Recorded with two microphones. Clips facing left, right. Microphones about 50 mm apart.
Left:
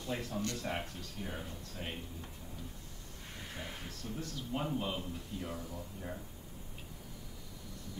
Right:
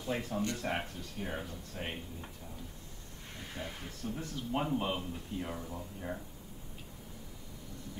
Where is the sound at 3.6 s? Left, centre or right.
Centre.